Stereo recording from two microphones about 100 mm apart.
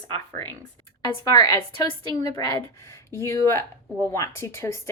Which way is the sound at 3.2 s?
30° left (ahead or behind).